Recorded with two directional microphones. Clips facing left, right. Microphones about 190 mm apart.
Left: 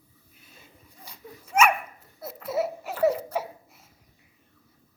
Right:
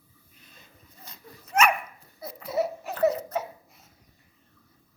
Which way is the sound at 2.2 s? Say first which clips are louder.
Even; 5° left (ahead or behind).